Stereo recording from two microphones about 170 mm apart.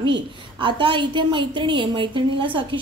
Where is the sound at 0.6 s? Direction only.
30° right (ahead or behind).